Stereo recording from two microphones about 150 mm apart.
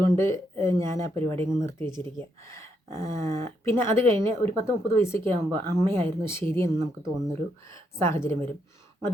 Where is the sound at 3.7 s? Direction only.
15° left (ahead or behind).